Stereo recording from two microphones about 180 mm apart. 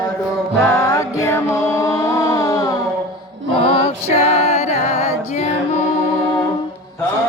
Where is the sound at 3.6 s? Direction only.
30° left (ahead or behind).